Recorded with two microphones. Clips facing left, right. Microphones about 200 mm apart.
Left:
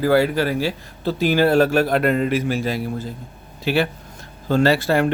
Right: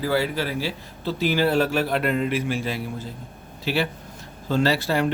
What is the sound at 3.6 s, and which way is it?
Speech, 55° left (ahead or behind).